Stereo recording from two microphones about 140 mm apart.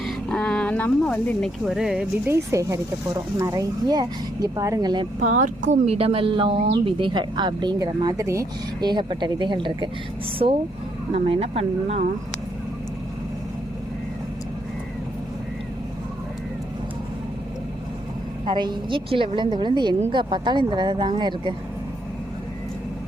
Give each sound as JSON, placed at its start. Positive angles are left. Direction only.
{"t": 0.0, "sound": "a sound", "side_deg": 5}
{"t": 2.2, "sound": "speech", "side_deg": -20}
{"t": 5.2, "sound": "speech", "side_deg": -60}
{"t": 5.8, "sound": "a woman's voice", "side_deg": -45}
{"t": 18.4, "sound": "a woman's voice", "side_deg": -30}